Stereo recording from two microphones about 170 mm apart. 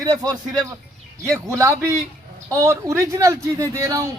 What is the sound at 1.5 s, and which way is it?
Speech, 20° right (ahead or behind).